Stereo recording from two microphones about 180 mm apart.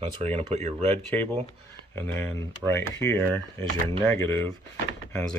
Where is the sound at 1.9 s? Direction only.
10° left (ahead or behind).